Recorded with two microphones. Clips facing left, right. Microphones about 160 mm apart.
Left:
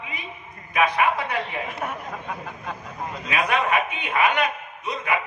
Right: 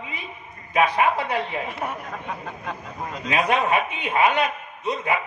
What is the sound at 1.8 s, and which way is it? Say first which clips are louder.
Speech: right 1 dB; 5° right (ahead or behind).